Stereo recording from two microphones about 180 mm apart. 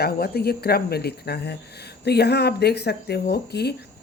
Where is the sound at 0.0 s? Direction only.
60° left (ahead or behind).